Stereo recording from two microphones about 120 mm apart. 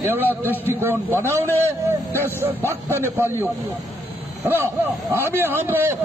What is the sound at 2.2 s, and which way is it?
A man's voice, 20° right (ahead or behind).